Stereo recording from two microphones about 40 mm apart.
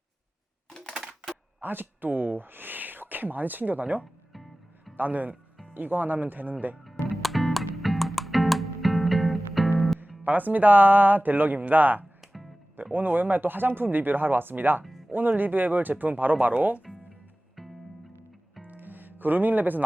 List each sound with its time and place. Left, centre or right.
1.0 s typewriter: centre
1.6 s speech: right
4.0 s music: centre
4.9 s speech: right
7.2 s music: centre
10.2 s speech: right
12.2 s music: centre
12.7 s speech: right
17.6 s music: centre
18.8 s music: right